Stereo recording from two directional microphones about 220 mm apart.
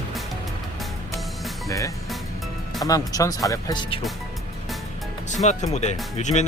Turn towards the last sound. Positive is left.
turn(degrees=30)  # may be behind; listen again after turning